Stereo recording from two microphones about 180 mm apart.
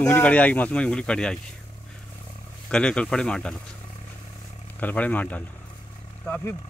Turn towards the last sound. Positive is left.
turn(degrees=10)  # may be behind; listen again after turning